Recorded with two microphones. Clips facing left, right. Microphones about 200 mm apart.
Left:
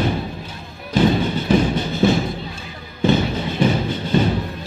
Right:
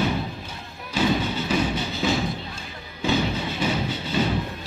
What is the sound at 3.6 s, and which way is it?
Music, 50° left (ahead or behind).